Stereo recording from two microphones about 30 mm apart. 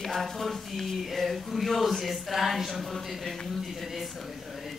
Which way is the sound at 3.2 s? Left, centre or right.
Centre.